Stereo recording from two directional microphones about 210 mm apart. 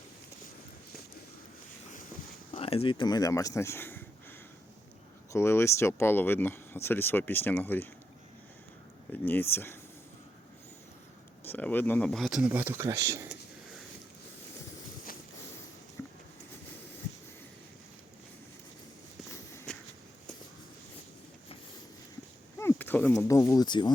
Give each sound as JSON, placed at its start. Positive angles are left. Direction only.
{"t": 2.5, "sound": "speech", "side_deg": 25}
{"t": 5.3, "sound": "speech", "side_deg": 10}
{"t": 9.2, "sound": "speech", "side_deg": 10}
{"t": 11.4, "sound": "speech", "side_deg": 10}
{"t": 22.5, "sound": "speech", "side_deg": 10}